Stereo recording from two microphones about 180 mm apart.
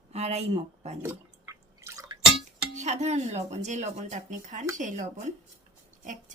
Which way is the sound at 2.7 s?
40° right (ahead or behind).